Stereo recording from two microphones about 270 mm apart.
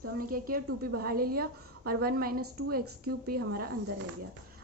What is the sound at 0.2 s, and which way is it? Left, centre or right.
A woman's voice, right.